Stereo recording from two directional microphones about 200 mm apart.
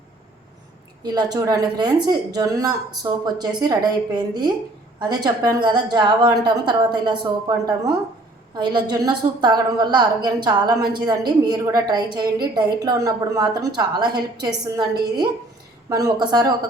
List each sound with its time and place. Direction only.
1.0 s a woman's voice: 20° right (ahead or behind)
15.9 s a woman's voice: 20° right (ahead or behind)